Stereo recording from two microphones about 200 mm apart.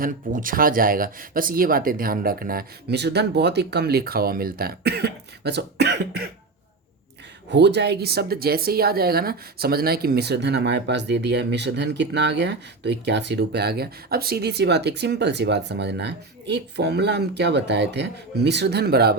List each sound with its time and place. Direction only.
0.0 s speech: 45° right (ahead or behind)
7.5 s a woman's voice: 60° right (ahead or behind)